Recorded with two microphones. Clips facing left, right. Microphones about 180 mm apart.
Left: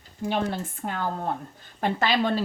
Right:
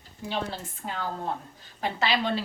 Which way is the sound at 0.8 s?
50° left (ahead or behind).